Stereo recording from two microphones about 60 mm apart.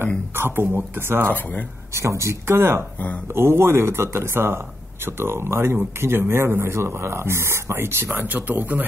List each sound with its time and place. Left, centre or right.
0.4 s speech: right
2.0 s speech: right